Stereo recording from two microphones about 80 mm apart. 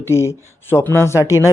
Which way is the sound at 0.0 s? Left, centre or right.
Left.